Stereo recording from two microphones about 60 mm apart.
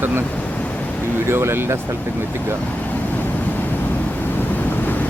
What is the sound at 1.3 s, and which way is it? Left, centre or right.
Speech, right.